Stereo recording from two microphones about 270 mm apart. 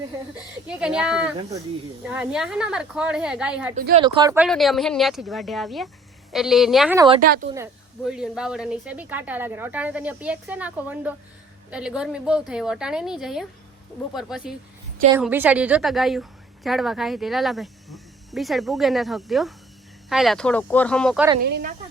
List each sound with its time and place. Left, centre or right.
0.7 s speech: centre
1.4 s speech: centre
2.0 s speech: centre
3.8 s speech: right
4.0 s speech: centre
4.4 s speech: centre
21.4 s speech: right